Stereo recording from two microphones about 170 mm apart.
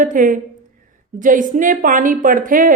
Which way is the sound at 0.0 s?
50° right (ahead or behind).